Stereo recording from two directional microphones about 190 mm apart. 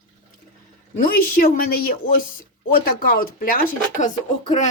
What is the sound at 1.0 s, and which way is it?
Speech, 50° left (ahead or behind).